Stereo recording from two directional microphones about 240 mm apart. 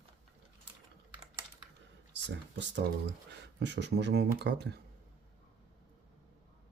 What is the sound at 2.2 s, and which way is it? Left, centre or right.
Speech, right.